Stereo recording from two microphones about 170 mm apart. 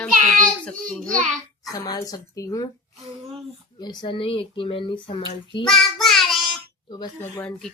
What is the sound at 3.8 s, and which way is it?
Speech, 25° left (ahead or behind).